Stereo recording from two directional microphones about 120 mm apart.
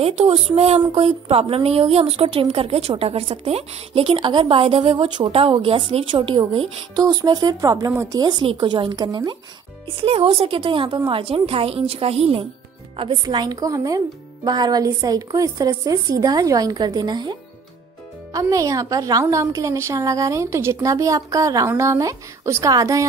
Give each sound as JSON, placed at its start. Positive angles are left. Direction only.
{"t": 0.0, "sound": "speech", "side_deg": -55}
{"t": 0.7, "sound": "speech", "side_deg": -45}
{"t": 7.0, "sound": "speech", "side_deg": -30}
{"t": 9.8, "sound": "speech", "side_deg": -50}
{"t": 13.2, "sound": "a woman's voice", "side_deg": -35}